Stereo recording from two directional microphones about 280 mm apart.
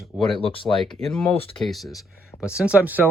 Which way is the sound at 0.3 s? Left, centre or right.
Centre.